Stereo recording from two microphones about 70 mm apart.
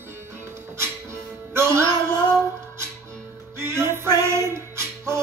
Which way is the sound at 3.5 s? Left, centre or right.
Right.